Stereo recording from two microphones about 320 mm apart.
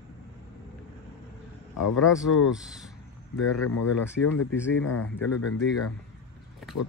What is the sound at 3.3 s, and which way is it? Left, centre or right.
Speech, left.